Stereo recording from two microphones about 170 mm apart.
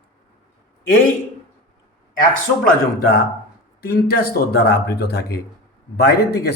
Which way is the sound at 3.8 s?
65° left (ahead or behind).